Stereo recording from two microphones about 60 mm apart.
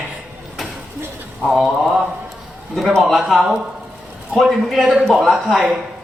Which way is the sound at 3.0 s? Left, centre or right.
Centre.